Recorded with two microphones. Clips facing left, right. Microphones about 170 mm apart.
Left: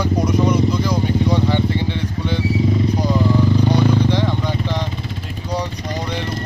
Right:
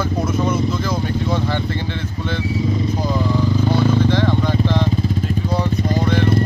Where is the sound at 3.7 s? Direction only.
15° left (ahead or behind).